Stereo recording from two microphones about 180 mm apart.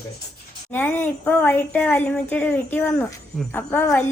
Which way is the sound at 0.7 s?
10° left (ahead or behind).